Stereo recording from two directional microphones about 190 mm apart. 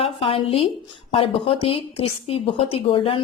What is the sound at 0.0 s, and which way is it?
A woman's voice, 30° left (ahead or behind).